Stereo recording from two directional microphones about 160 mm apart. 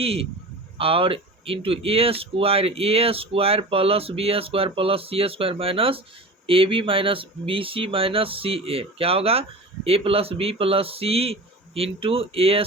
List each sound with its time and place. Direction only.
0.0 s speech: 35° right (ahead or behind)